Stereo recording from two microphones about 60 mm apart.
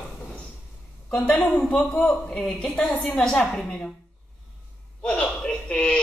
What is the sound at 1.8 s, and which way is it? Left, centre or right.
A woman's voice, centre.